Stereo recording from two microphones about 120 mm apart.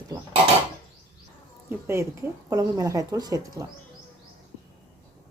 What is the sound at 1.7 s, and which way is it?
A woman's voice, 20° right (ahead or behind).